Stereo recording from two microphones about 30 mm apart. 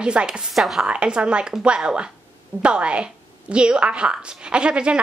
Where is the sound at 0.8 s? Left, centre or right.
Right.